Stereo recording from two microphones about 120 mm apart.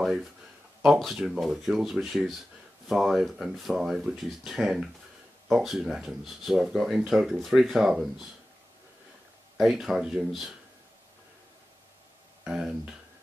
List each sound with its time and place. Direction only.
0.8 s speech: centre (ahead or behind)
9.6 s speech: centre (ahead or behind)
12.4 s speech: 5° right (ahead or behind)